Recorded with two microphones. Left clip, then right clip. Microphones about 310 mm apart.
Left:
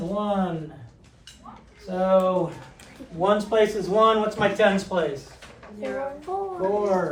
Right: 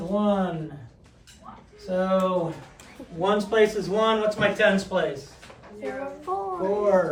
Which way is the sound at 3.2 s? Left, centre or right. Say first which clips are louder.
Left 1 dB; centre.